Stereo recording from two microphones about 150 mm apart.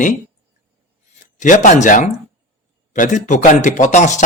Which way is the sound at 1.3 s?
60° left (ahead or behind).